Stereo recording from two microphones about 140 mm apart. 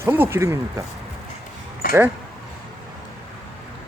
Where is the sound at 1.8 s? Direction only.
90° left.